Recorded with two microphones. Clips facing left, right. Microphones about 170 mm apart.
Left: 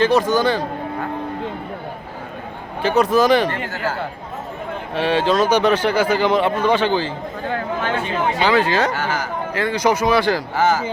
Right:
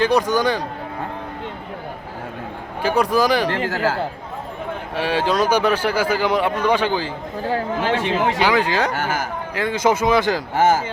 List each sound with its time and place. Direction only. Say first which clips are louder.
0.0 s a man's voice: left 2 dB; 15° right (ahead or behind)
2.8 s a man's voice: left 2 dB; 10° right (ahead or behind)
3.7 s speech: right 4 dB; 90° right
4.9 s a man's voice: left 2 dB; 10° right (ahead or behind)
7.4 s speech: right 2 dB; 35° right (ahead or behind)
8.4 s a man's voice: left 1 dB; 15° right (ahead or behind)
9.0 s speech: even; 50° right (ahead or behind)
9.6 s speech: even; 20° right (ahead or behind)